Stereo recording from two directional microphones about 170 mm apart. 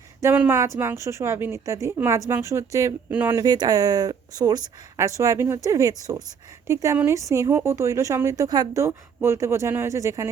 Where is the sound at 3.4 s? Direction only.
25° right (ahead or behind).